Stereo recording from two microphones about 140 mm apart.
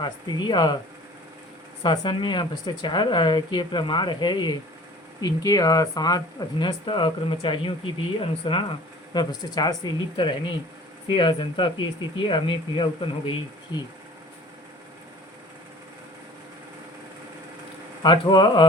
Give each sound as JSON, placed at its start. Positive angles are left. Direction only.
{"t": 0.0, "sound": "speech", "side_deg": 30}
{"t": 1.8, "sound": "speech", "side_deg": 35}
{"t": 18.0, "sound": "speech", "side_deg": 35}